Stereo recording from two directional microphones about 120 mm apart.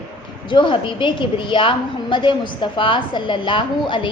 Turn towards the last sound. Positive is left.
turn(degrees=40)  # may be behind; listen again after turning